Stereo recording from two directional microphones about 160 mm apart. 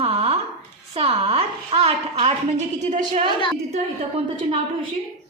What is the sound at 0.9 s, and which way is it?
A woman's voice, 40° right (ahead or behind).